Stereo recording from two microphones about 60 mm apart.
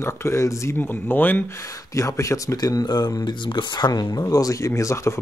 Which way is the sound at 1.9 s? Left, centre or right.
Left.